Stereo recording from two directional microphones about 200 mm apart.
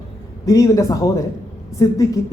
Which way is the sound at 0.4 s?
15° left (ahead or behind).